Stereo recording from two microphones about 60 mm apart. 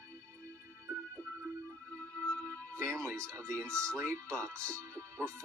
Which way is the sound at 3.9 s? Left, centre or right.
Right.